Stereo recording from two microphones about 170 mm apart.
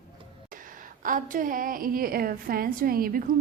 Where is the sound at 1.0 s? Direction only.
50° right (ahead or behind).